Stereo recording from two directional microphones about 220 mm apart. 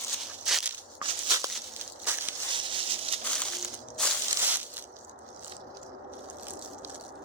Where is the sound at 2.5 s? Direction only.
25° right (ahead or behind).